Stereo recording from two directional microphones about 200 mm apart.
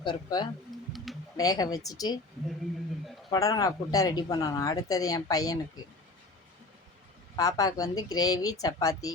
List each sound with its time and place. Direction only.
0.0 s a woman's voice: 20° left (ahead or behind)
0.7 s a sound: centre (ahead or behind)
1.4 s a woman's voice: 20° left (ahead or behind)
3.2 s speech: 20° left (ahead or behind)
7.3 s speech: 20° left (ahead or behind)